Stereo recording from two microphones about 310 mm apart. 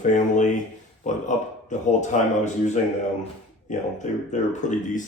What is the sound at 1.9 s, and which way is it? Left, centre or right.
Speech, left.